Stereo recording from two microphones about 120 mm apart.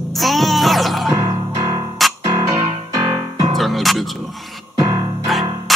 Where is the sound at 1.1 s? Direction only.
35° right (ahead or behind).